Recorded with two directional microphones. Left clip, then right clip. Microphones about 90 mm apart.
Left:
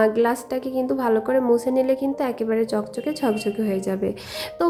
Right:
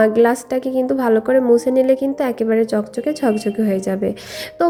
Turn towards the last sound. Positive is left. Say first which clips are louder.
# right 4 dB
turn(degrees=-35)  # may be behind; listen again after turning